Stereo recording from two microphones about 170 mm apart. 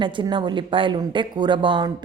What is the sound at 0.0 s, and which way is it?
Speech, 30° right (ahead or behind).